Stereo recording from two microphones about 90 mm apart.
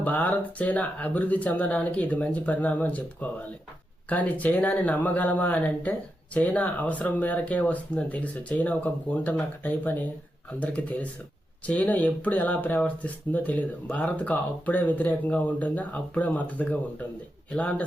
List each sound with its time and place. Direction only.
0.0 s speech: 20° left (ahead or behind)